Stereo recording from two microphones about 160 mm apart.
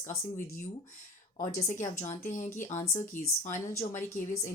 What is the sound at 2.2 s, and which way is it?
A woman's voice, 55° left (ahead or behind).